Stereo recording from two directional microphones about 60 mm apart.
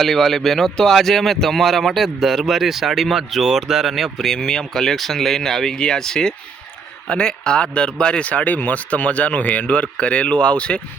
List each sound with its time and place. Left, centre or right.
0.0 s speech: centre